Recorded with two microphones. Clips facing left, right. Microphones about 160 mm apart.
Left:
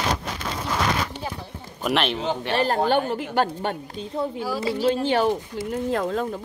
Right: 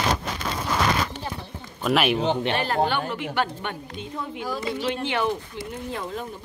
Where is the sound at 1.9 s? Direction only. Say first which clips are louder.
Right 2 dB; 10° right (ahead or behind).